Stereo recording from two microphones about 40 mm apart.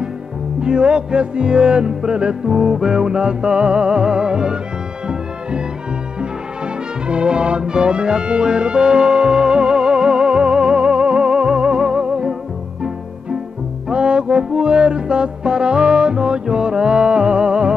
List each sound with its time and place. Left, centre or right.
0.6 s music: right
6.6 s music: right
13.8 s music: right